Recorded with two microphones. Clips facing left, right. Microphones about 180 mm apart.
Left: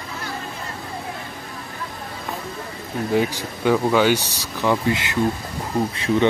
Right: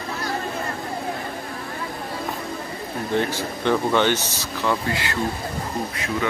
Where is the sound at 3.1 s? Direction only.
10° left (ahead or behind).